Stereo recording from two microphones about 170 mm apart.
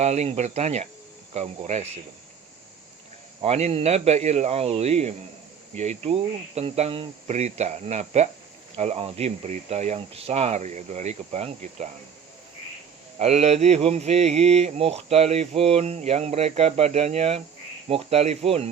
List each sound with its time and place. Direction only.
0.0 s speech: 40° right (ahead or behind)
3.4 s speech: 35° right (ahead or behind)
13.1 s speech: 40° right (ahead or behind)